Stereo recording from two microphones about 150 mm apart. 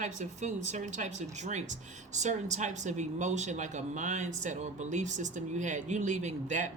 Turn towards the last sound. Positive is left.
turn(degrees=-55)  # may be behind; listen again after turning